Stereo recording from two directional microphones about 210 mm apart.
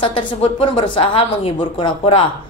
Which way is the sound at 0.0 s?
25° left (ahead or behind).